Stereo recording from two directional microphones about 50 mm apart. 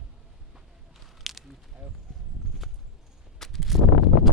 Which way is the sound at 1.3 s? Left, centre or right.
Centre.